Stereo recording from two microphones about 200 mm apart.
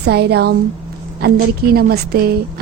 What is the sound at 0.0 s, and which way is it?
A woman's voice, 55° right (ahead or behind).